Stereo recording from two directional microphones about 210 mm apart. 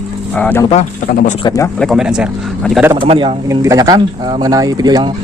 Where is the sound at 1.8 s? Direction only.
Centre (ahead or behind).